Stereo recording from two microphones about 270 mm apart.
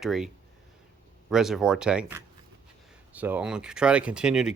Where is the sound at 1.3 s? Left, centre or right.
Centre.